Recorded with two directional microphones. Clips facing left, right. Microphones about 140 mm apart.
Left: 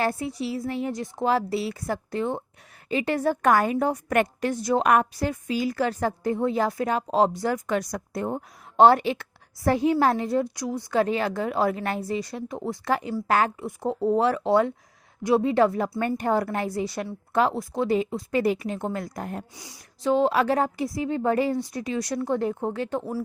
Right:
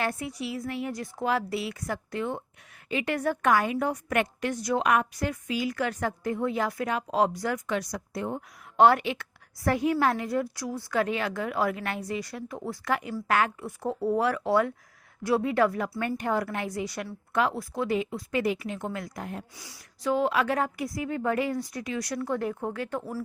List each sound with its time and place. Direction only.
0.0 s a woman's voice: 30° left (ahead or behind)
3.5 s a woman's voice: 40° left (ahead or behind)
4.5 s speech: 25° left (ahead or behind)
4.8 s a woman's voice: 45° left (ahead or behind)
5.1 s a woman's voice: 30° left (ahead or behind)
7.7 s a woman's voice: 50° left (ahead or behind)
13.6 s a woman's voice: 20° left (ahead or behind); by 19.5 s 45° left (ahead or behind)
19.5 s speech: 20° left (ahead or behind)